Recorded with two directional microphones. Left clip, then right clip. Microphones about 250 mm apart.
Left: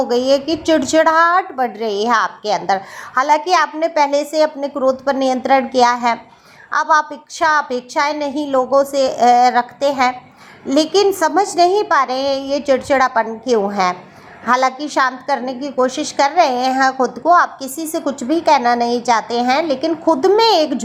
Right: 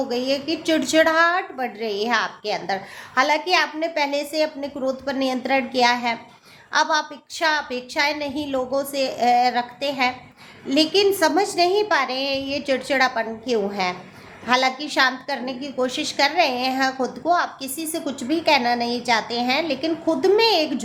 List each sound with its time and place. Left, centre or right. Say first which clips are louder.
0.0 s a woman's voice: left 9 dB; centre